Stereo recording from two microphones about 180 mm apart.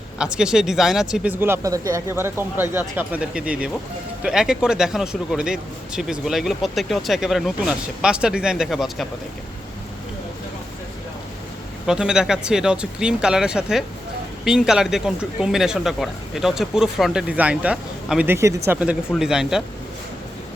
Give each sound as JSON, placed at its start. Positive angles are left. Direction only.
{"t": 0.2, "sound": "speech", "side_deg": -5}
{"t": 11.9, "sound": "speech", "side_deg": -5}